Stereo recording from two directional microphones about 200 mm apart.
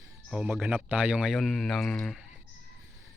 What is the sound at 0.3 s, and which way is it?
A man's voice, 5° right (ahead or behind).